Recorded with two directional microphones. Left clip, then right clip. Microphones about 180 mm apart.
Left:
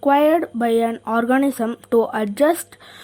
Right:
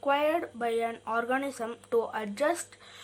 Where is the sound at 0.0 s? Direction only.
45° left (ahead or behind).